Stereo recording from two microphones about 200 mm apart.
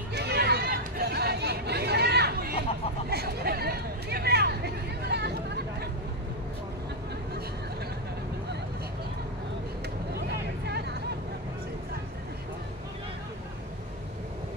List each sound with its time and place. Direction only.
0.1 s chatter: 55° right (ahead or behind)
3.1 s hubbub: 50° right (ahead or behind)
10.1 s vehicle: 55° right (ahead or behind)